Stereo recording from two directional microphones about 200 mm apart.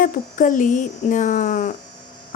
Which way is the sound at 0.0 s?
40° left (ahead or behind).